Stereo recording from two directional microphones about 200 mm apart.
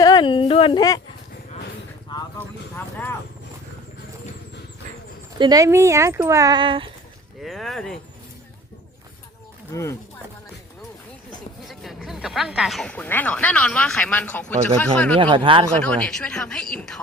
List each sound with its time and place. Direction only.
0.0 s a sound: 20° left (ahead or behind)
2.7 s speech: 10° left (ahead or behind)
5.4 s speech: 20° right (ahead or behind)
7.4 s a sound: centre (ahead or behind)
9.7 s speech: 15° left (ahead or behind)
11.7 s speech: centre (ahead or behind)
15.2 s speech: 25° right (ahead or behind)
15.8 s speech: 5° left (ahead or behind)